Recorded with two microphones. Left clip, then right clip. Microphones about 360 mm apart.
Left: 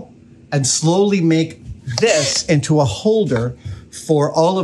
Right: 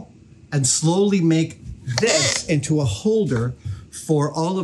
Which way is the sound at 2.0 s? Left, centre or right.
Centre.